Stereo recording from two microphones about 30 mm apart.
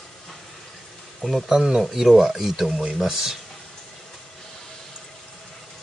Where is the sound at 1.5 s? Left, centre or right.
Centre.